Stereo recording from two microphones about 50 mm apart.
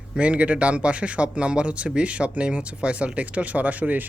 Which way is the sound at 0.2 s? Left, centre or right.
Right.